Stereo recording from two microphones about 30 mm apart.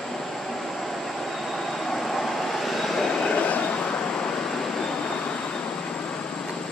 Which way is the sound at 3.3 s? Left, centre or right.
Left.